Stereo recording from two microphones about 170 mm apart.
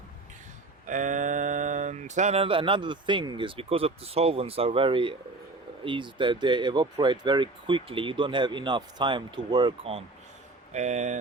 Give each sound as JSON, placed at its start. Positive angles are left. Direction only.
{"t": 0.9, "sound": "speech", "side_deg": -50}
{"t": 10.7, "sound": "speech", "side_deg": -45}